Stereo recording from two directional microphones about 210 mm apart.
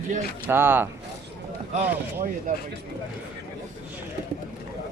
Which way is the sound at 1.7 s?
35° right (ahead or behind).